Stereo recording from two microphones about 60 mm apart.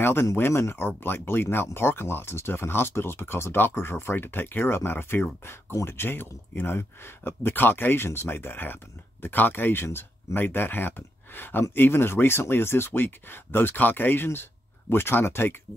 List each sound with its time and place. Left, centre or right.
0.0 s speech: left